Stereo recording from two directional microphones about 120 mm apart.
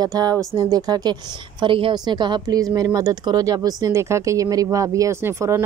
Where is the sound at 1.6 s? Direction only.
50° right (ahead or behind).